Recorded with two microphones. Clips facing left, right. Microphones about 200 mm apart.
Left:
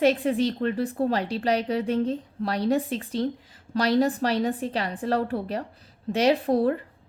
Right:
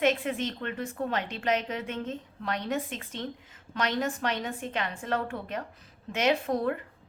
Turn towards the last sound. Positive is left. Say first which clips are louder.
# left 6 dB
turn(degrees=35)  # may be behind; listen again after turning